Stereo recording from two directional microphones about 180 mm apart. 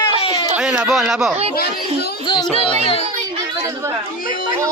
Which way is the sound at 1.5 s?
60° left (ahead or behind).